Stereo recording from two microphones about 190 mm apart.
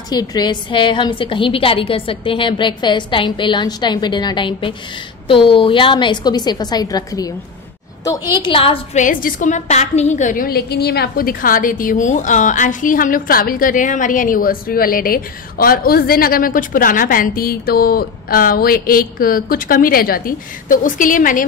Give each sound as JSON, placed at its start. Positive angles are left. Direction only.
{"t": 0.1, "sound": "a woman's voice", "side_deg": 20}
{"t": 8.4, "sound": "a woman's voice", "side_deg": 30}
{"t": 9.0, "sound": "a woman's voice", "side_deg": 45}